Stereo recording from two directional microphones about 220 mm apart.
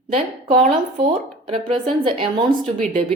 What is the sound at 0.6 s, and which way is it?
A woman's voice, 30° right (ahead or behind).